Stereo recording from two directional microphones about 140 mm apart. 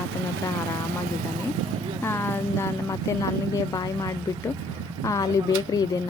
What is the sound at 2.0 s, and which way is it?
Speech, 20° left (ahead or behind).